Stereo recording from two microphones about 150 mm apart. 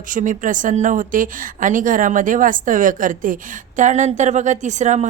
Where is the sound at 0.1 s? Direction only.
60° right (ahead or behind).